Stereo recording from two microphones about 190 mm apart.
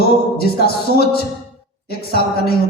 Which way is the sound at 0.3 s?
55° left (ahead or behind).